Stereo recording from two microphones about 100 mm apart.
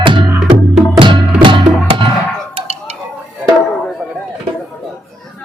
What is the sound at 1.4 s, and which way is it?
Music, 55° right (ahead or behind).